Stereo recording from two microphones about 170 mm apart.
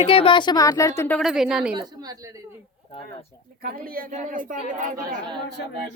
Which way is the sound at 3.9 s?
55° right (ahead or behind).